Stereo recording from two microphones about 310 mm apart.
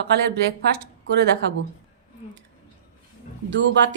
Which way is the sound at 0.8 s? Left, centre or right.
Right.